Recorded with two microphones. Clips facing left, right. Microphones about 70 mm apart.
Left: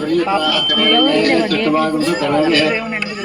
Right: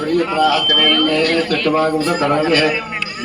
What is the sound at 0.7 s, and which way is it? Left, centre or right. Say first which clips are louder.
Speech: left 2 dB; centre.